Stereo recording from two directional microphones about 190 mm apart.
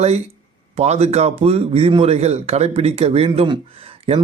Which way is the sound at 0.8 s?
35° right (ahead or behind).